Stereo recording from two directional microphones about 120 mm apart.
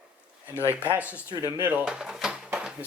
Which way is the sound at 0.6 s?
20° left (ahead or behind).